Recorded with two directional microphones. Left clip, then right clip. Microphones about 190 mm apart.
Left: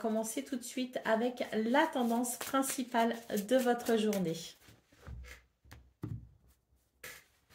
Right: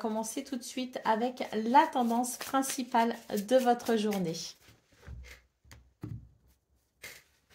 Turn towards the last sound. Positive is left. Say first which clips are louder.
# right 1 dB
turn(degrees=-10)  # may be behind; listen again after turning